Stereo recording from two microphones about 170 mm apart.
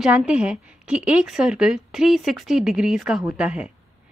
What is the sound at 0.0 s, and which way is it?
A woman's voice, 5° right (ahead or behind).